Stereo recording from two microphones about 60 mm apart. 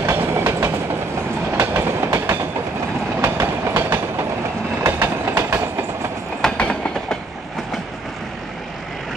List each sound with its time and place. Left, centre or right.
0.0 s train: right
6.5 s train: centre